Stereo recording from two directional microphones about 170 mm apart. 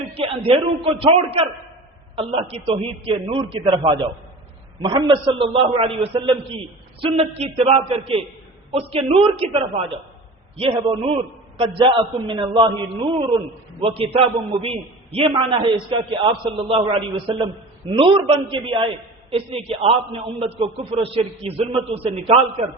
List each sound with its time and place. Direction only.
0.1 s a man's voice: 35° right (ahead or behind)
13.8 s a man's voice: 35° right (ahead or behind)